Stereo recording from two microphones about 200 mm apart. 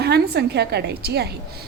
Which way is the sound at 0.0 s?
55° right (ahead or behind).